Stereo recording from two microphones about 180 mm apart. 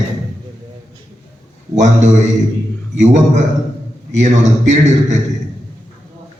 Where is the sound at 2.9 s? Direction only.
40° right (ahead or behind).